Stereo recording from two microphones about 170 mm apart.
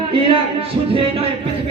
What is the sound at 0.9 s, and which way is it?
Speech, 35° right (ahead or behind).